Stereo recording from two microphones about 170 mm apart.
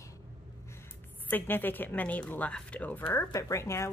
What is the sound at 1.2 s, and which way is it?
Speech, 10° left (ahead or behind).